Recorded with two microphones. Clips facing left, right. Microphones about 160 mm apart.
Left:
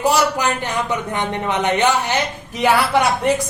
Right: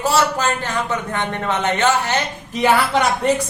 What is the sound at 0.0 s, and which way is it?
A man's voice, 15° left (ahead or behind).